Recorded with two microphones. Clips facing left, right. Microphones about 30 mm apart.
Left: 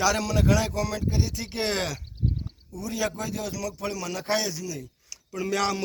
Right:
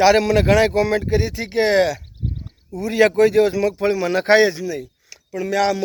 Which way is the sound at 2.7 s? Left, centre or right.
Right.